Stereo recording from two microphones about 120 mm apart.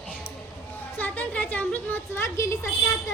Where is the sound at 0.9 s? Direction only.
15° left (ahead or behind).